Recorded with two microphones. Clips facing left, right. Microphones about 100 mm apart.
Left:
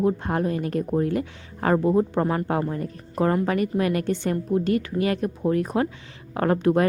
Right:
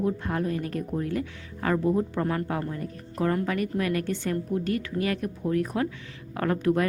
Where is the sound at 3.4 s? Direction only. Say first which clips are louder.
Left 4 dB; 25° left (ahead or behind).